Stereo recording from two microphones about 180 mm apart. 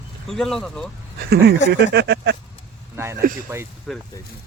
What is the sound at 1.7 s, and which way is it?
Speech, 70° right (ahead or behind).